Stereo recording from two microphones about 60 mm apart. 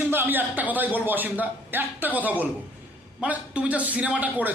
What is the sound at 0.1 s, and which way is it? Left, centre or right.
A man's voice, right.